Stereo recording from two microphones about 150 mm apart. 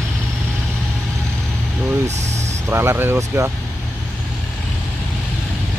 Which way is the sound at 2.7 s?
15° right (ahead or behind).